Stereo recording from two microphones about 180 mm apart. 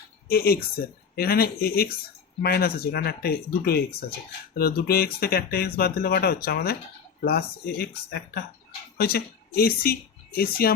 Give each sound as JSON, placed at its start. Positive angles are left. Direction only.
{"t": 0.3, "sound": "speech", "side_deg": 60}